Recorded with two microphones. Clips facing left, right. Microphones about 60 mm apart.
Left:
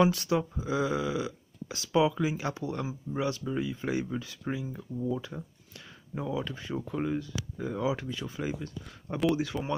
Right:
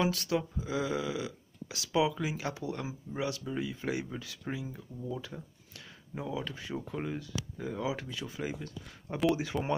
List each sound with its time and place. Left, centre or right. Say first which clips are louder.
0.0 s speech: left 5 dB; centre
4.7 s speech: left 7 dB; centre
6.1 s speech: left 4 dB; centre
9.3 s speech: left 2 dB; centre